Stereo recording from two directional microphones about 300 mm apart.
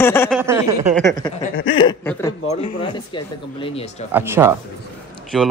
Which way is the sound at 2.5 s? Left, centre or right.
Centre.